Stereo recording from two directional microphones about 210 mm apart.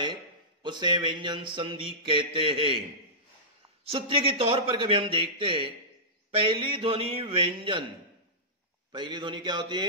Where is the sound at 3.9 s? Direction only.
25° right (ahead or behind).